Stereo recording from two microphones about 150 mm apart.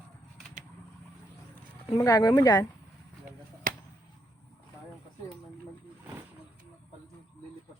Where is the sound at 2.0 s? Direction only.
20° left (ahead or behind).